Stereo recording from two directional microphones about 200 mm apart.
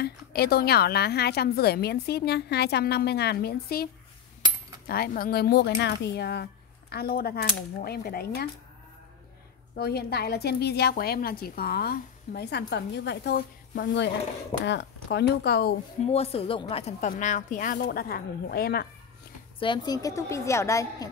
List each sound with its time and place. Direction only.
0.0 s a woman's voice: 50° left (ahead or behind)
9.8 s a woman's voice: 50° left (ahead or behind)
16.1 s a woman's voice: 30° left (ahead or behind); by 18.9 s 50° left (ahead or behind)
19.6 s a woman's voice: 20° left (ahead or behind)